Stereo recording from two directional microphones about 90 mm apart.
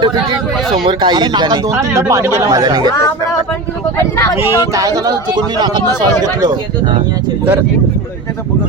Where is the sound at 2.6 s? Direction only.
50° right (ahead or behind).